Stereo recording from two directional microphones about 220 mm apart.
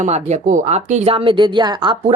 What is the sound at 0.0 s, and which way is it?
Speech, 30° right (ahead or behind).